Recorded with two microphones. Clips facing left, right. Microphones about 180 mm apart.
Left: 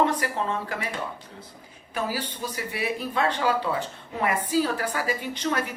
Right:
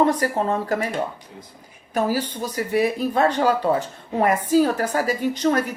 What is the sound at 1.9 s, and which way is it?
A woman's voice, 45° right (ahead or behind).